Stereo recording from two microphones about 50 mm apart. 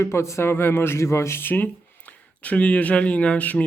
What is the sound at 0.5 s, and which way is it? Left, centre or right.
Speech, left.